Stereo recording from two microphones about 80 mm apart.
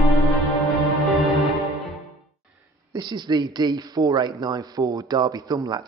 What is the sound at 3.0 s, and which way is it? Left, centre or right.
Speech, right.